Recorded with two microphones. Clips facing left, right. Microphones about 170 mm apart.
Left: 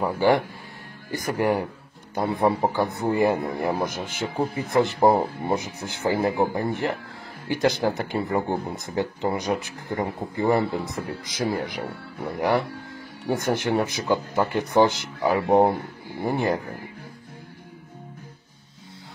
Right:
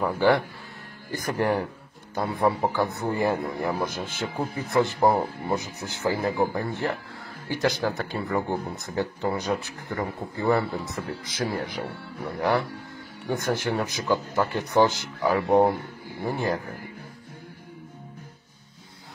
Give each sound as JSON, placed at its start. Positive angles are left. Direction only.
{"t": 0.0, "sound": "speech", "side_deg": 15}